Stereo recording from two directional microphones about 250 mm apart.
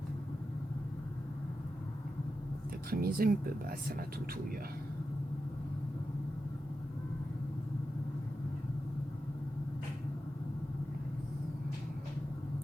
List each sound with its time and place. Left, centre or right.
2.9 s speech: right